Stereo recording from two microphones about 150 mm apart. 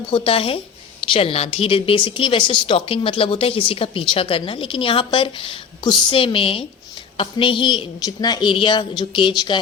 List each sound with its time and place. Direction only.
0.1 s a woman's voice: 40° left (ahead or behind)